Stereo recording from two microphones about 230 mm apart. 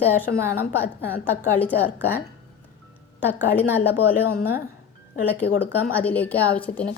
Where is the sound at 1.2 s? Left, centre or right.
Centre.